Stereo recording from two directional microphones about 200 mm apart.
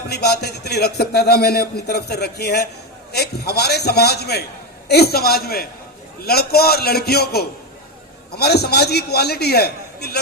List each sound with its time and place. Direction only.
0.1 s a man's voice: 55° left (ahead or behind)